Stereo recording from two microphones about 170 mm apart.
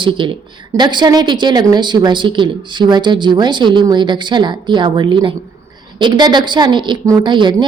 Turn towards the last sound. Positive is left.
turn(degrees=-25)  # may be behind; listen again after turning